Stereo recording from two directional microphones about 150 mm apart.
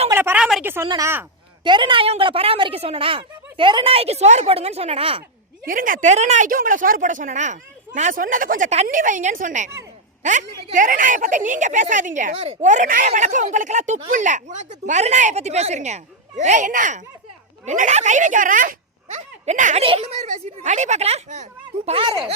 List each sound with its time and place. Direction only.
0.1 s a sound: 15° right (ahead or behind)
0.9 s speech: 20° right (ahead or behind)
1.6 s speech: 30° right (ahead or behind)
5.6 s speech: 65° right (ahead or behind)
12.3 s speech: 40° right (ahead or behind)
12.6 s a woman's voice: 55° right (ahead or behind)
19.8 s a woman's voice: 40° right (ahead or behind)
21.8 s speech: 40° right (ahead or behind)